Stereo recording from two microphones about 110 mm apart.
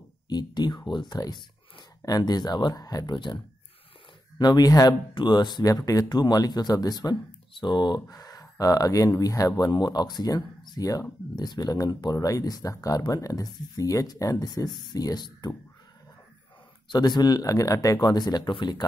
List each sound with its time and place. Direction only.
0.3 s speech: 40° left (ahead or behind)
4.4 s speech: 35° left (ahead or behind)
16.9 s speech: 40° left (ahead or behind)